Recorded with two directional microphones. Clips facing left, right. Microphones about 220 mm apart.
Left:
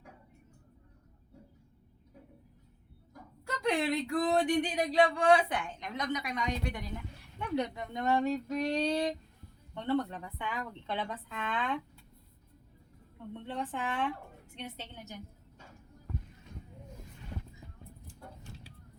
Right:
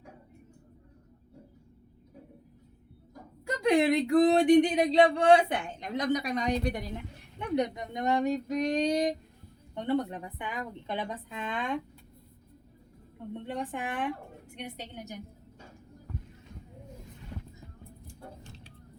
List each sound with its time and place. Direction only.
3.4 s speech: 15° right (ahead or behind); by 7.0 s 35° right (ahead or behind)
7.3 s a woman's voice: 20° right (ahead or behind)
13.1 s a woman's voice: 15° right (ahead or behind)
18.1 s a sound: 10° left (ahead or behind)